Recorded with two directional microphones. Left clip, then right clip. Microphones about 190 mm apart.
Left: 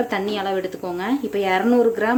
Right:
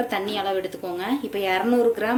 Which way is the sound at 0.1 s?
25° left (ahead or behind).